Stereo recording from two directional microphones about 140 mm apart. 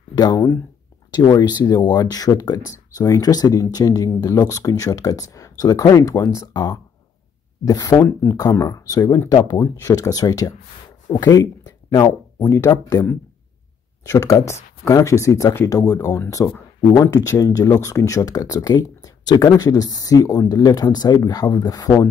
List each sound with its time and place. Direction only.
0.1 s speech: 30° left (ahead or behind)